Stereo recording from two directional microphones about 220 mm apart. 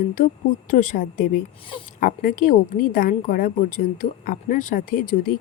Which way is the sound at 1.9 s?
40° left (ahead or behind).